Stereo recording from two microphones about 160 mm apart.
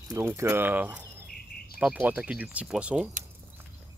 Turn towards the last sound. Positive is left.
turn(degrees=-5)  # may be behind; listen again after turning